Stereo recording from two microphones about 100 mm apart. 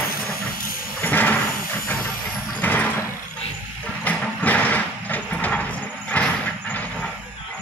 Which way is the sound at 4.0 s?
15° left (ahead or behind).